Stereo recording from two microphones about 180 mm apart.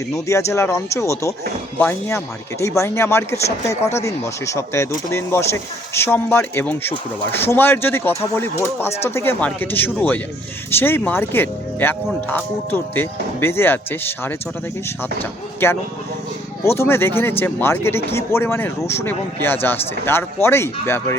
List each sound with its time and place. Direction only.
0.3 s speech: 15° left (ahead or behind)
15.6 s speech: 15° left (ahead or behind)